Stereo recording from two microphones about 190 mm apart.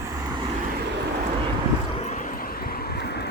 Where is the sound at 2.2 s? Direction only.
50° left (ahead or behind).